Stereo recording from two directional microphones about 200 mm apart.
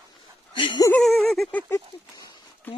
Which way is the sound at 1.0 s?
Centre (ahead or behind).